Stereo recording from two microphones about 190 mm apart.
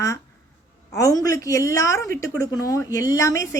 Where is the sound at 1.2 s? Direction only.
20° left (ahead or behind).